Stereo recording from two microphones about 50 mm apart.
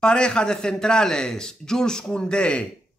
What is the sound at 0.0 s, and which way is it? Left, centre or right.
Speech, centre.